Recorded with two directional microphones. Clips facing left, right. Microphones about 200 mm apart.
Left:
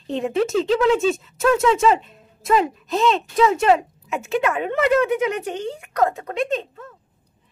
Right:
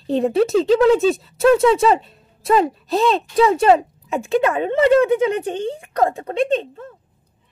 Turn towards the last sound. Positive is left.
turn(degrees=-30)  # may be behind; listen again after turning